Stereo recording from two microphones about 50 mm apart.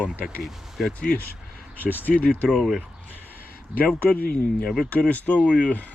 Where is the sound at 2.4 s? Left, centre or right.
Centre.